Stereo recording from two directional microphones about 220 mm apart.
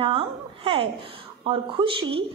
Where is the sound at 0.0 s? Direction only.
25° right (ahead or behind).